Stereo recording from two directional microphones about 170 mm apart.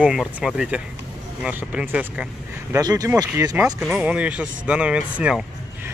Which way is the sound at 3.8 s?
10° right (ahead or behind).